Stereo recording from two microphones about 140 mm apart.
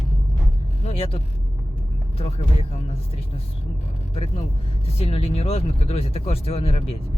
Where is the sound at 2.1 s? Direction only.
45° left (ahead or behind).